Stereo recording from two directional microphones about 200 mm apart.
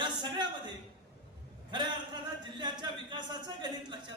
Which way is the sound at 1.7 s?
20° right (ahead or behind).